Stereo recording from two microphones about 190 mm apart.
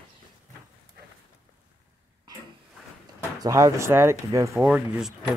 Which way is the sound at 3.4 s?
15° right (ahead or behind).